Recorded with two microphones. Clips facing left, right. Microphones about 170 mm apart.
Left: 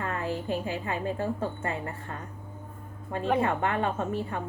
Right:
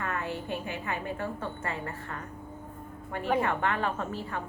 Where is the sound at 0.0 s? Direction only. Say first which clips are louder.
Left 2 dB; 30° left (ahead or behind).